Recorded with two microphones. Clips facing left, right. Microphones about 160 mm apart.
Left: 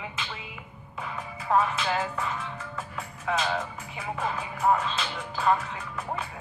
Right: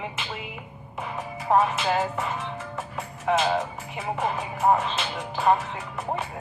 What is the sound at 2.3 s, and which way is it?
Music, 20° right (ahead or behind).